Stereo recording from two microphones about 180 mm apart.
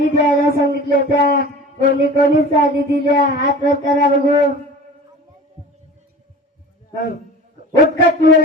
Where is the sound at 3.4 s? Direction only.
50° left (ahead or behind).